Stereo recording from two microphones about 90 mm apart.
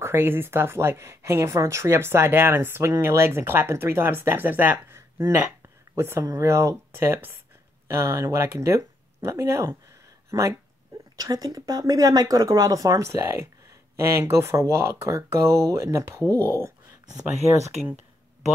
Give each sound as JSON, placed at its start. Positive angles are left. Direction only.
{"t": 0.0, "sound": "speech", "side_deg": -25}
{"t": 4.9, "sound": "a sound", "side_deg": -30}
{"t": 5.9, "sound": "speech", "side_deg": -25}
{"t": 16.3, "sound": "speech", "side_deg": 30}